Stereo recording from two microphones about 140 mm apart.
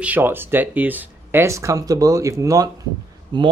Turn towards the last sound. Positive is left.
turn(degrees=-30)  # may be behind; listen again after turning